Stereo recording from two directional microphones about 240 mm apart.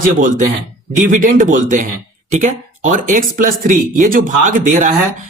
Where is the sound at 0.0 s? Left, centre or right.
Right.